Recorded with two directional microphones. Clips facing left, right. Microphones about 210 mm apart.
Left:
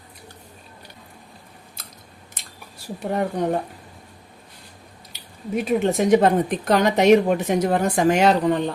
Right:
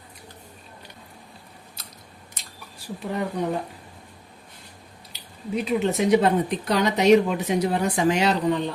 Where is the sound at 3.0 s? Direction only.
50° left (ahead or behind).